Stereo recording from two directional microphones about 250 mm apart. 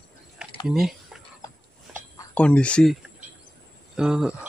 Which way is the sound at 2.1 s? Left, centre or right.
Centre.